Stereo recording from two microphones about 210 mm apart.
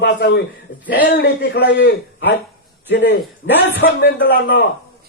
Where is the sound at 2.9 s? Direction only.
60° left (ahead or behind).